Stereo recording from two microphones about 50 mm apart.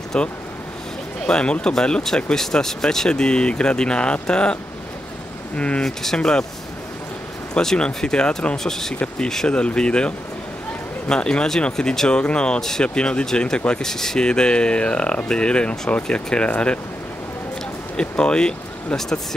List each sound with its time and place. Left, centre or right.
0.1 s speech: centre
5.6 s speech: left
7.6 s speech: centre
9.5 s speech: left
12.1 s speech: left
17.9 s speech: centre